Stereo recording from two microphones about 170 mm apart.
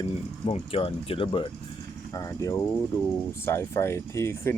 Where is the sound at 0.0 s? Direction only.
35° left (ahead or behind).